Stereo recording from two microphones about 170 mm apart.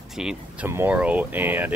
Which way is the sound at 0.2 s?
5° right (ahead or behind).